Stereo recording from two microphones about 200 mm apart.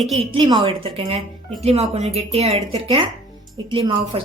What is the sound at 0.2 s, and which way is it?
A woman's voice, 25° right (ahead or behind).